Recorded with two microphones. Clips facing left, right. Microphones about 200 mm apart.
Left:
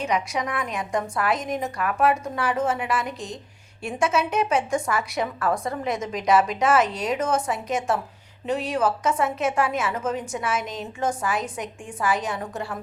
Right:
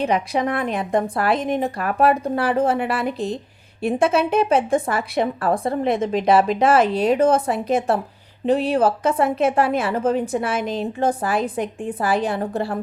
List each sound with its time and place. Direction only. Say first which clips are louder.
0.0 s a woman's voice: right 5 dB; 30° right (ahead or behind)